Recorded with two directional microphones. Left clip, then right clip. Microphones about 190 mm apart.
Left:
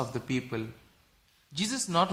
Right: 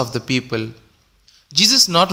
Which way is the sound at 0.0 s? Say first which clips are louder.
Right 12 dB; 35° right (ahead or behind).